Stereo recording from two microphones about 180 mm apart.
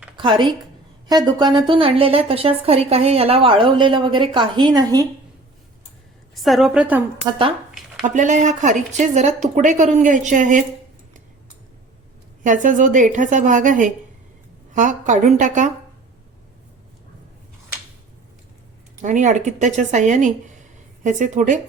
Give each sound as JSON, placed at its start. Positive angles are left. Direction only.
{"t": 0.2, "sound": "a woman's voice", "side_deg": -25}
{"t": 6.3, "sound": "a woman's voice", "side_deg": 0}
{"t": 8.0, "sound": "speech", "side_deg": -45}
{"t": 12.4, "sound": "a woman's voice", "side_deg": -45}
{"t": 19.0, "sound": "a woman's voice", "side_deg": -45}